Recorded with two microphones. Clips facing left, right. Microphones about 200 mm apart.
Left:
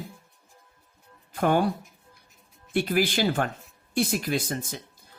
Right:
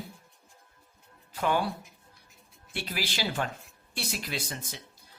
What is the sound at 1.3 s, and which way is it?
Speech, 50° left (ahead or behind).